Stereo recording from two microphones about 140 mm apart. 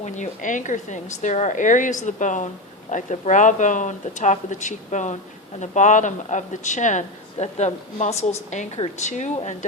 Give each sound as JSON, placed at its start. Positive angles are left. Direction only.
{"t": 0.0, "sound": "speech", "side_deg": 60}